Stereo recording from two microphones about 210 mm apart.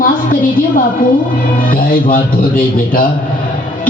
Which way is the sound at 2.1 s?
40° left (ahead or behind).